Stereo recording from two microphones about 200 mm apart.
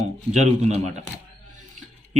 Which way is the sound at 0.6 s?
35° right (ahead or behind).